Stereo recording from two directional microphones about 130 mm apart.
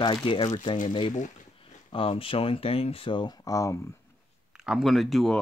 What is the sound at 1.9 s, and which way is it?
Speech, 40° left (ahead or behind).